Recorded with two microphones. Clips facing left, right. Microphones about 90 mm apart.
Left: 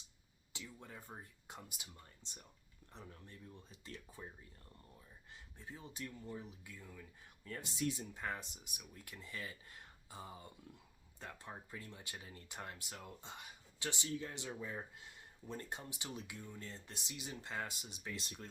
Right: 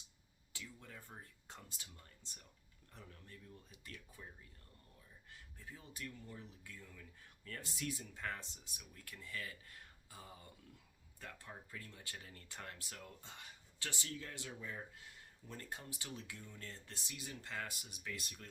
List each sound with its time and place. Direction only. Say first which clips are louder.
0.5 s speech: left 2 dB; 20° left (ahead or behind)
5.3 s speech: left 3 dB; 25° left (ahead or behind)